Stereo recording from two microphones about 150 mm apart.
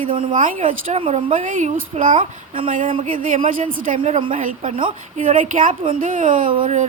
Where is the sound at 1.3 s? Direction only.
55° right (ahead or behind).